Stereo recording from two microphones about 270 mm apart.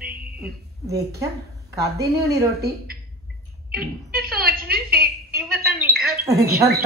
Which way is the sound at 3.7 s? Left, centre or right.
Right.